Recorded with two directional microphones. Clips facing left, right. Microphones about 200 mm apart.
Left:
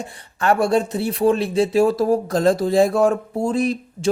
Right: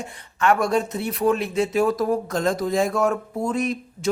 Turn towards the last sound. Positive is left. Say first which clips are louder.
# left 4 dB
turn(degrees=30)  # may be behind; listen again after turning